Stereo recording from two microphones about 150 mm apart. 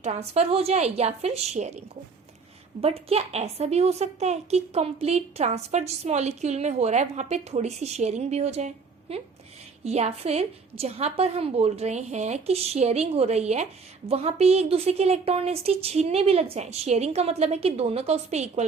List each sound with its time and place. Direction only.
0.0 s a woman's voice: 45° right (ahead or behind)
2.8 s a woman's voice: 40° right (ahead or behind)